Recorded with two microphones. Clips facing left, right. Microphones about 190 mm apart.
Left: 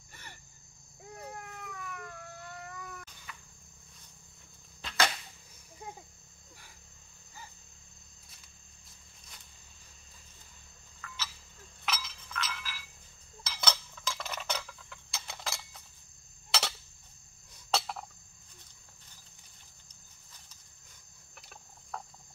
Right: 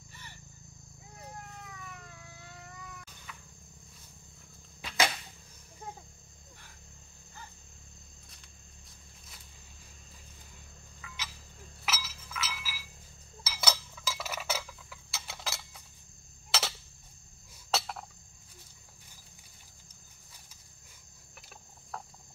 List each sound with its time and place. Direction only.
0.1 s cricket: 55° left (ahead or behind)
1.1 s a sound: 60° left (ahead or behind)
3.3 s cricket: centre (ahead or behind)
4.8 s arrow: 10° right (ahead or behind)
11.8 s chink: 5° right (ahead or behind)
13.4 s a sound: 5° right (ahead or behind)
17.6 s cricket: centre (ahead or behind)
21.4 s cricket: centre (ahead or behind)